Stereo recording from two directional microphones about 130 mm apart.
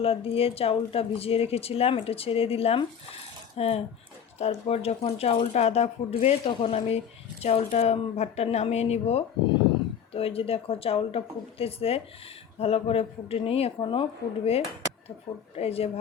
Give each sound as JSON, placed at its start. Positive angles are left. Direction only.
{"t": 0.0, "sound": "speech", "side_deg": 45}